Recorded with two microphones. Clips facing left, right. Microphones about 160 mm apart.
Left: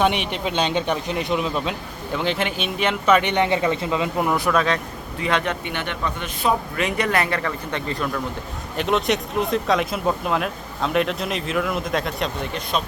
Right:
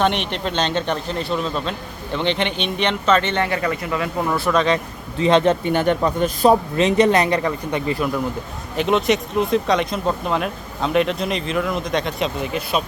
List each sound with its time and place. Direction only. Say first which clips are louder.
0.0 s speech: right 1 dB; 10° left (ahead or behind)
4.5 s speech: right 6 dB; centre (ahead or behind)
5.2 s speech: right 8 dB; 30° right (ahead or behind)
6.7 s speech: right 7 dB; 25° right (ahead or behind)
8.7 s speech: right 3 dB; centre (ahead or behind)